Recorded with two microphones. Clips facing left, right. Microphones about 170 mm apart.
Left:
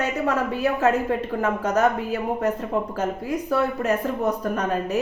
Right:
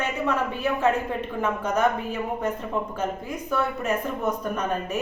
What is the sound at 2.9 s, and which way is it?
A woman's voice, 35° left (ahead or behind).